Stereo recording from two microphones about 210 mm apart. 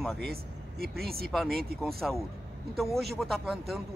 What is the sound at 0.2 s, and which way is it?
Speech, 45° right (ahead or behind).